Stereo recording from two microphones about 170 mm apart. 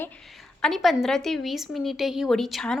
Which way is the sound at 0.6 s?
Centre (ahead or behind).